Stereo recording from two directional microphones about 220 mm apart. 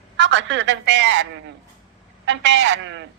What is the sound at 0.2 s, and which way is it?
A man's voice, 55° right (ahead or behind).